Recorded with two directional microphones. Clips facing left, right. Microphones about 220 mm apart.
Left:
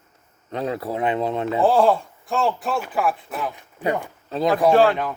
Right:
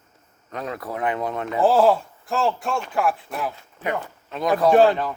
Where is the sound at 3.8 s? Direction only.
15° left (ahead or behind).